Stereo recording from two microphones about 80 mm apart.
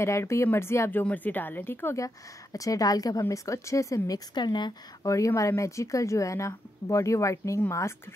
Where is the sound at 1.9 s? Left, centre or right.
Left.